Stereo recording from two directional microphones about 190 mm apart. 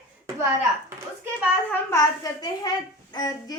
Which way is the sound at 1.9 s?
20° left (ahead or behind).